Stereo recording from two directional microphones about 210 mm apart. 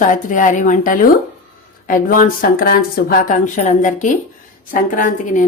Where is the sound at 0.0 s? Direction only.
40° left (ahead or behind).